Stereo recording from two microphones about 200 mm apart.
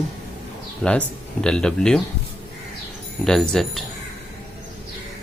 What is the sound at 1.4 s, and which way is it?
Speech, 5° left (ahead or behind).